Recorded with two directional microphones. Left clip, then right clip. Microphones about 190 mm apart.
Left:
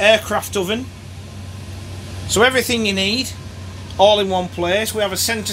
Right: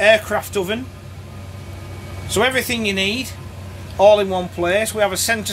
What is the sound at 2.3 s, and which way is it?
A man's voice, 10° left (ahead or behind).